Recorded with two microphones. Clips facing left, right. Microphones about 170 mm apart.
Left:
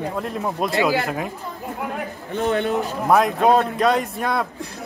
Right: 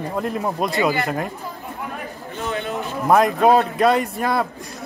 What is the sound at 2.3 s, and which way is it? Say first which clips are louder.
Speech: left 6 dB; 55° left (ahead or behind).